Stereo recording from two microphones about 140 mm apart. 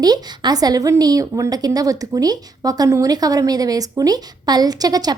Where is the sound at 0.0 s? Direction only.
30° right (ahead or behind).